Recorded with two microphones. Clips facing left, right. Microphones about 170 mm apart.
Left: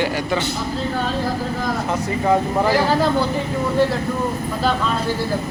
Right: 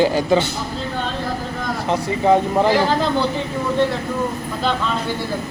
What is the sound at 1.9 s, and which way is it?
Speech, 20° right (ahead or behind).